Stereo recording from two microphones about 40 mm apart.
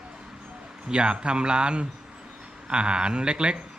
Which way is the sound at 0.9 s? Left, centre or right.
Right.